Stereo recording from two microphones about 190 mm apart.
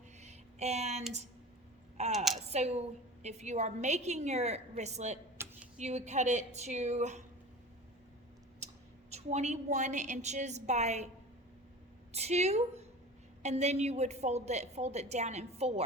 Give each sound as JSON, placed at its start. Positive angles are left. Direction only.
{"t": 0.2, "sound": "a sound", "side_deg": -35}
{"t": 2.1, "sound": "a woman's voice", "side_deg": 0}
{"t": 2.5, "sound": "a woman's voice", "side_deg": -35}
{"t": 9.0, "sound": "a woman's voice", "side_deg": -35}
{"t": 12.1, "sound": "a woman's voice", "side_deg": -35}